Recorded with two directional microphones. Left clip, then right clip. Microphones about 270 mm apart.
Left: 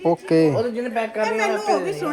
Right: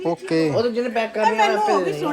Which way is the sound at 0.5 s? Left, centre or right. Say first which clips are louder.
Right 2 dB; right.